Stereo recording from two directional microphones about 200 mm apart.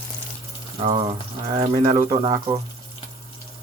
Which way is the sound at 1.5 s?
25° right (ahead or behind).